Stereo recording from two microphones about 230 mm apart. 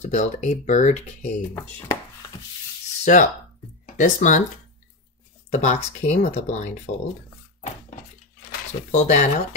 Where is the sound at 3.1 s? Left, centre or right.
Left.